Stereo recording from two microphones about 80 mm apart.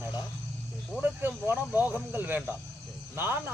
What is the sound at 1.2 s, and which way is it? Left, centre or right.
Speech, right.